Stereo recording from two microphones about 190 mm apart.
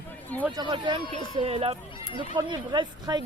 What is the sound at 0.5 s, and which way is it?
Speech, 25° right (ahead or behind).